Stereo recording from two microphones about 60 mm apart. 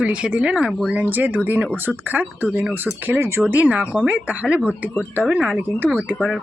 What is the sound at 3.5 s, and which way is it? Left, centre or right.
Speech, right.